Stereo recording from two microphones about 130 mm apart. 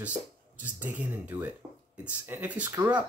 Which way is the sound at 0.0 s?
10° right (ahead or behind).